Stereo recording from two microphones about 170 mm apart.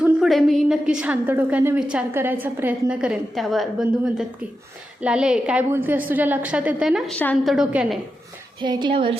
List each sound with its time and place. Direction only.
0.0 s a woman's voice: centre (ahead or behind)
8.6 s speech: 25° right (ahead or behind)